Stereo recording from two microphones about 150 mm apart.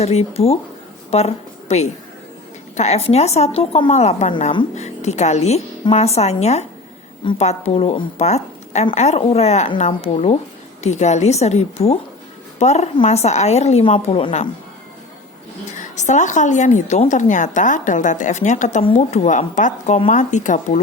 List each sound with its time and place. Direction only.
0.0 s a woman's voice: 45° left (ahead or behind)
15.7 s a woman's voice: 55° left (ahead or behind)
18.8 s a woman's voice: 45° left (ahead or behind)